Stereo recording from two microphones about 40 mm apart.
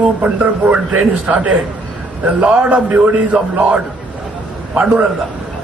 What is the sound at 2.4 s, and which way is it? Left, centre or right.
A man's voice, right.